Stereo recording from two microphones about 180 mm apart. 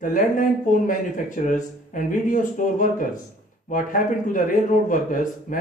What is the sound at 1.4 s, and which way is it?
A man's voice, 45° left (ahead or behind).